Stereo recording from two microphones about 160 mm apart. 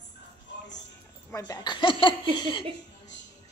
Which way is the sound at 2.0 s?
30° left (ahead or behind).